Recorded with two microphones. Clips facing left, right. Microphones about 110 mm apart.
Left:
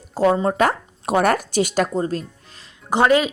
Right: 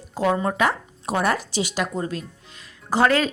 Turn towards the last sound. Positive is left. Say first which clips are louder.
# left 3 dB
turn(degrees=20)  # may be behind; listen again after turning